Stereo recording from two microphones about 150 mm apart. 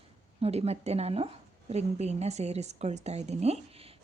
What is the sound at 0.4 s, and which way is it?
A woman's voice, 45° right (ahead or behind).